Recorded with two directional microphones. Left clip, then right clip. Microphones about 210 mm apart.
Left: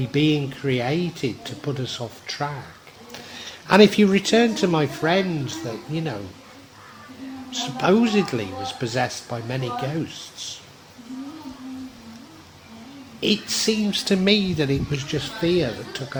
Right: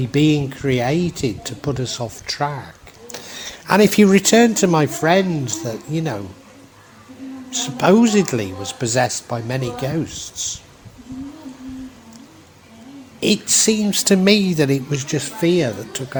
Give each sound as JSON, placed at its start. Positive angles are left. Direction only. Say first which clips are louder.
{"t": 0.0, "sound": "speech", "louder": "right 4 dB", "side_deg": -30}
{"t": 7.5, "sound": "speech", "louder": "right 5 dB", "side_deg": -30}
{"t": 13.1, "sound": "speech", "louder": "right 5 dB", "side_deg": -30}